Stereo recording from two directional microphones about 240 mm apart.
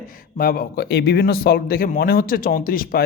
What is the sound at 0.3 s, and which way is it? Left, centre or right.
A man's voice, left.